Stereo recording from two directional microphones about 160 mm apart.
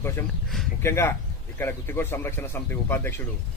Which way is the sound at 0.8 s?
15° left (ahead or behind).